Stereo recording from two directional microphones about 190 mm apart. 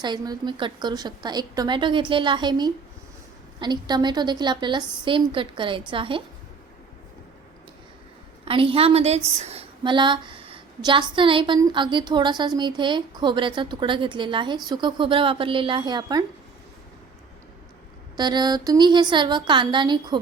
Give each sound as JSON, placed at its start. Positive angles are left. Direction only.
{"t": 0.0, "sound": "a woman's voice", "side_deg": -25}
{"t": 8.4, "sound": "a woman's voice", "side_deg": -30}
{"t": 18.2, "sound": "a woman's voice", "side_deg": -20}